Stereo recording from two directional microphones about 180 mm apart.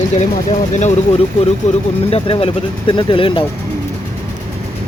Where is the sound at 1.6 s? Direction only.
40° left (ahead or behind).